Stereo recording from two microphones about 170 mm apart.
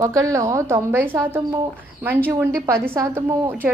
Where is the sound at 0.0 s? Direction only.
20° right (ahead or behind).